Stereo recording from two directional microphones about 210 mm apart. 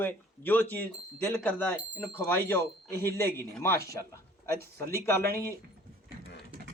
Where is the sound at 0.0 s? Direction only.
10° left (ahead or behind).